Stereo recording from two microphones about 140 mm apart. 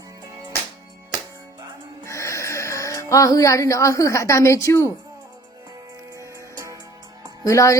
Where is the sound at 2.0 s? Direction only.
20° left (ahead or behind).